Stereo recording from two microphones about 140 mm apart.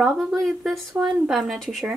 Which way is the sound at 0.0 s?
Centre (ahead or behind).